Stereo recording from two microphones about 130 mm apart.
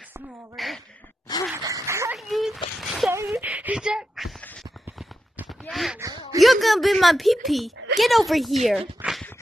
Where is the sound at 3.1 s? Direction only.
15° right (ahead or behind).